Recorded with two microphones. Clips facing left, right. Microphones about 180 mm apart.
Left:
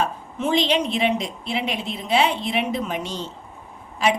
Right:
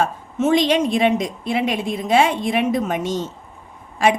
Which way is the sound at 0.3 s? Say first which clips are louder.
Right 5 dB; 45° right (ahead or behind).